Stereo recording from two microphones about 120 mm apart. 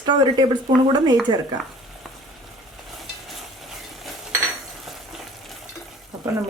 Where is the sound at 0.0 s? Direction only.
35° right (ahead or behind).